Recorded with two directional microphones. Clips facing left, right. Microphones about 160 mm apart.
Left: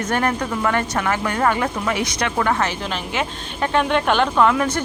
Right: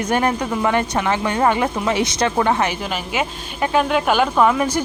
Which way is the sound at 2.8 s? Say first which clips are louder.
Right 1 dB; 10° right (ahead or behind).